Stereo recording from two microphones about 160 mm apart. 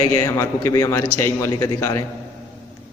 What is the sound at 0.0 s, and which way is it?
A man's voice, 15° left (ahead or behind).